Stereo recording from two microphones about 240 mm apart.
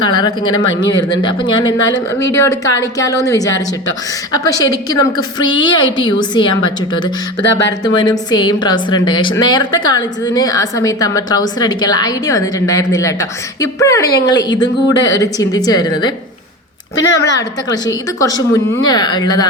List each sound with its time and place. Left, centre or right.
0.0 s a woman's voice: centre
7.9 s a woman's voice: centre